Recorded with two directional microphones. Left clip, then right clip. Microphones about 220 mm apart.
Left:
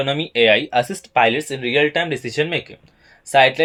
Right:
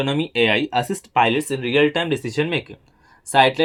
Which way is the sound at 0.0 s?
20° right (ahead or behind).